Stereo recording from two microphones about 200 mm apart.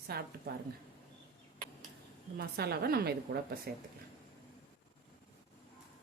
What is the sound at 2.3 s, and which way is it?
A woman's voice, 50° right (ahead or behind).